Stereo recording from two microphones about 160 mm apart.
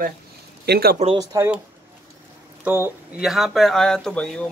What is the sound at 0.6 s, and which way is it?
Speech, 80° right.